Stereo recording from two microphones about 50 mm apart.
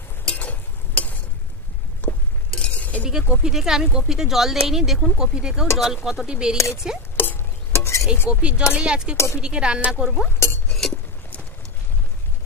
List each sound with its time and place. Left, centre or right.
0.3 s a sound: left
2.0 s stir: left
2.6 s chink: left
3.0 s a sound: centre
3.4 s speech: centre
7.2 s music: left
7.7 s stir: left
8.3 s speech: centre
9.1 s speech: left
9.4 s speech: centre
10.7 s chink: centre